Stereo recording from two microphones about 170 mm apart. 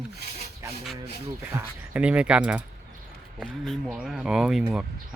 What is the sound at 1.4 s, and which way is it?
Speech, 10° right (ahead or behind).